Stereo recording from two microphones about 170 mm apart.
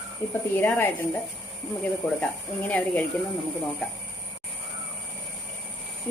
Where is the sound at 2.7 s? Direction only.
10° left (ahead or behind).